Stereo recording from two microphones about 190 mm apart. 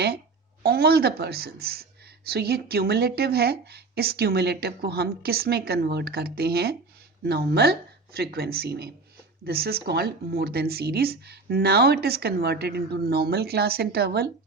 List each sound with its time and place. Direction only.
0.6 s speech: 55° right (ahead or behind)